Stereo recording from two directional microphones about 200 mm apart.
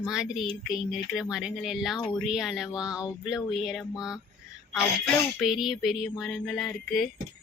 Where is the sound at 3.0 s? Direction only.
15° left (ahead or behind).